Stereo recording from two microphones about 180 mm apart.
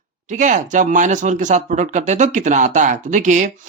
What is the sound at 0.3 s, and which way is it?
Speech, 45° right (ahead or behind).